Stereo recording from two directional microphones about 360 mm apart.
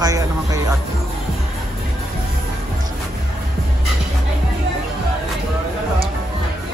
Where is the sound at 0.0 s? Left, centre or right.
Centre.